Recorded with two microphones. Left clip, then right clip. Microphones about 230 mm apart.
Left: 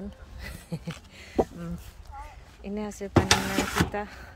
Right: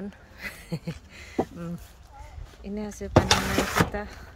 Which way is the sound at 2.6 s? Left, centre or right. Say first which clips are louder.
Left 1 dB; centre.